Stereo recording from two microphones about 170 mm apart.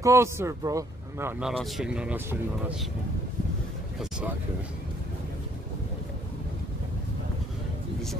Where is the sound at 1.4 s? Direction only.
Centre (ahead or behind).